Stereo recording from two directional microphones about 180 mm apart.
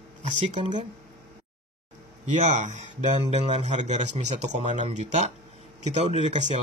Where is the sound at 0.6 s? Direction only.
25° right (ahead or behind).